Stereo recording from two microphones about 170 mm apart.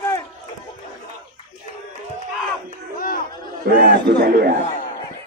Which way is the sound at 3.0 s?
55° left (ahead or behind).